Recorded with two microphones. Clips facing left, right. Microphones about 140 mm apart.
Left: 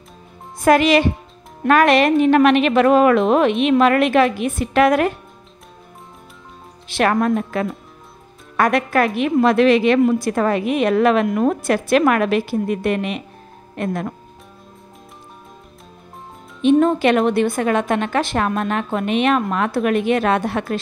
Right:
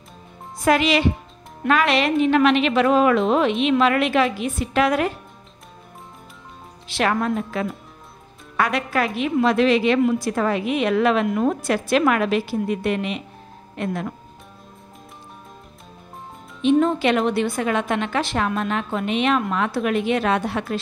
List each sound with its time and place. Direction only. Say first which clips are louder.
0.7 s a woman's voice: left 4 dB; 50° left (ahead or behind)
6.9 s a woman's voice: left 4 dB; 50° left (ahead or behind)
16.6 s a woman's voice: left 3 dB; 50° left (ahead or behind)